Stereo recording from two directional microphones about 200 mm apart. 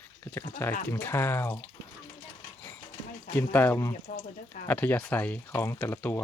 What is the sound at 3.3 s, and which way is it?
Speech, 10° left (ahead or behind).